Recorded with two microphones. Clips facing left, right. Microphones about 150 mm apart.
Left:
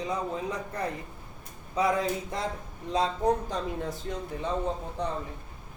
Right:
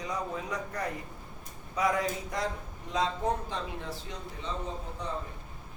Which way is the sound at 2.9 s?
40° left (ahead or behind).